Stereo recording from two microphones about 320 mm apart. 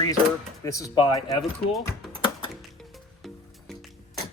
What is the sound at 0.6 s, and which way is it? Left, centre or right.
Speech, centre.